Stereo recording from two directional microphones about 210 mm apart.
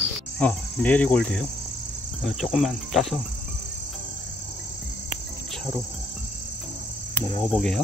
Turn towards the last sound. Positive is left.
turn(degrees=0)  # may be behind; listen again after turning